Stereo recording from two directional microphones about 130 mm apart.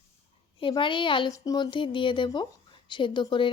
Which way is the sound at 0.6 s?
40° left (ahead or behind).